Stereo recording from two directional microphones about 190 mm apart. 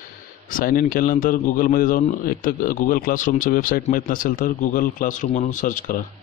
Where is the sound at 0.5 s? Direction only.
45° left (ahead or behind).